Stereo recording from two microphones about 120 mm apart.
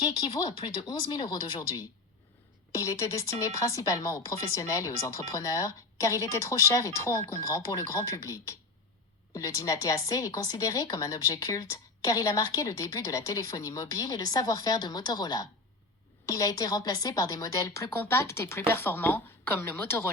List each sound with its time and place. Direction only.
0.3 s a woman's voice: 40° left (ahead or behind)
2.8 s a woman's voice: 25° left (ahead or behind)